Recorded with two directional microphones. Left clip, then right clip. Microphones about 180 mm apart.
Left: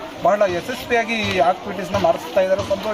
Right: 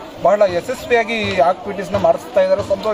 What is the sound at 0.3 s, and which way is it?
A man's voice, 35° right (ahead or behind).